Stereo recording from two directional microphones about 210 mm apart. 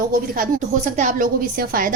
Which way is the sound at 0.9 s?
40° right (ahead or behind).